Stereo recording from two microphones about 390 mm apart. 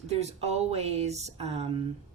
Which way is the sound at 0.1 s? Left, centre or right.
Centre.